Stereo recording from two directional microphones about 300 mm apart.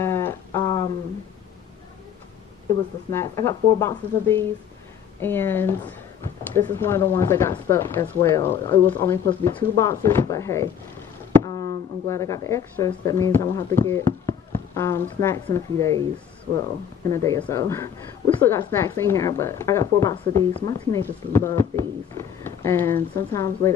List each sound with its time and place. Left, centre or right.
0.0 s a sound: centre
3.1 s a woman's voice: centre
17.1 s a woman's voice: centre